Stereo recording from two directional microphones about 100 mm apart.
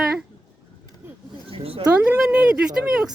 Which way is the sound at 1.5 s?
70° right (ahead or behind).